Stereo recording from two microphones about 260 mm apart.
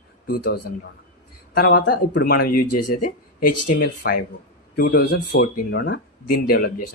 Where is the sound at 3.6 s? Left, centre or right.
Left.